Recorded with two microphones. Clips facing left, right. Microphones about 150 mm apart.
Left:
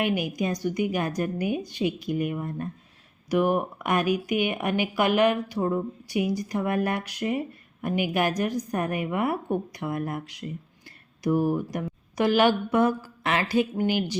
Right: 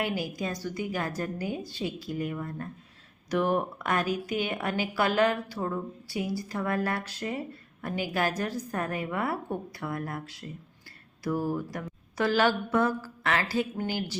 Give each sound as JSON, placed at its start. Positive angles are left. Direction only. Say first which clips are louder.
{"t": 0.0, "sound": "a woman's voice", "louder": "left 5 dB", "side_deg": 20}